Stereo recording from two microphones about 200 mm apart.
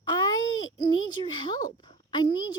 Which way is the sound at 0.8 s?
20° left (ahead or behind).